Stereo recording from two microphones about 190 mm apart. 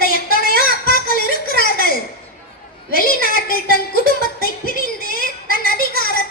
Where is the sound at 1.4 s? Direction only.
50° left (ahead or behind).